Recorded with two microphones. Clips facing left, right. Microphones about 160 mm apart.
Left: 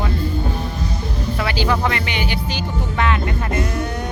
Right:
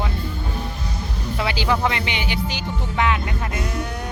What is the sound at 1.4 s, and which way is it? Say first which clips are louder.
Music: left 1 dB; 15° right (ahead or behind).